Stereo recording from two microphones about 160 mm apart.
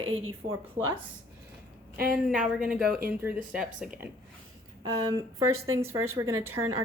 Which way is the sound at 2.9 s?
70° right (ahead or behind).